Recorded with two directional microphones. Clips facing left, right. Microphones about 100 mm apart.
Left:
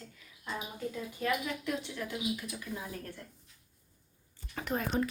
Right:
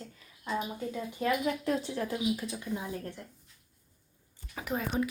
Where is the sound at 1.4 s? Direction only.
35° right (ahead or behind).